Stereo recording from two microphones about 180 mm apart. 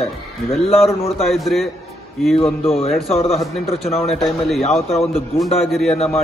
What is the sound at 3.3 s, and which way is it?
A man's voice, centre (ahead or behind).